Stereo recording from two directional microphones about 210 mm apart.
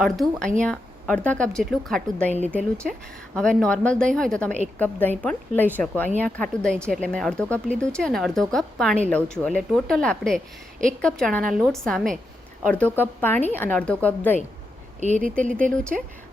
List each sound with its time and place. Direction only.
0.0 s speech: centre (ahead or behind)
3.3 s a woman's voice: 5° left (ahead or behind)
15.0 s speech: 35° right (ahead or behind)
15.7 s speech: 5° left (ahead or behind)